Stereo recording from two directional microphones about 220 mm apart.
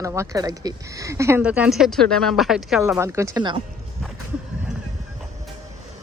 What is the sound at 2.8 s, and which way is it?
Speech, 10° right (ahead or behind).